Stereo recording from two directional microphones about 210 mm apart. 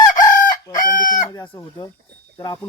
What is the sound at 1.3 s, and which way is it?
Speech, 15° left (ahead or behind).